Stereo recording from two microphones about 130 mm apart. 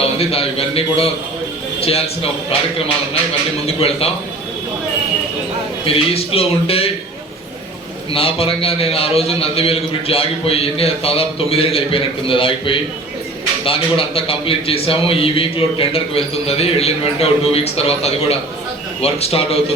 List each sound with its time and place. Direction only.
0.0 s a man's voice: 50° left (ahead or behind)
3.7 s a man's voice: 50° left (ahead or behind)
5.8 s a man's voice: 45° left (ahead or behind)
8.1 s a man's voice: 45° left (ahead or behind)